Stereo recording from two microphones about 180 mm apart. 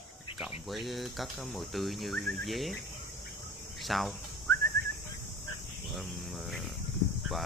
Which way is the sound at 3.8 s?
Centre (ahead or behind).